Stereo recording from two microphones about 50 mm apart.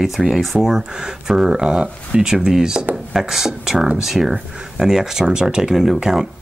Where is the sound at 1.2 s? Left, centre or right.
Centre.